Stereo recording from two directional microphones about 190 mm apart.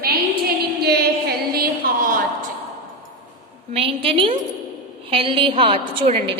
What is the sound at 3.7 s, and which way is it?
A woman's voice, 30° right (ahead or behind).